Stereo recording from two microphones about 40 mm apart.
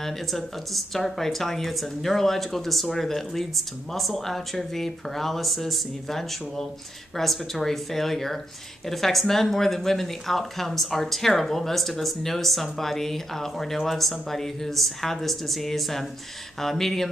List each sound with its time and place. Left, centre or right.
0.0 s speech: centre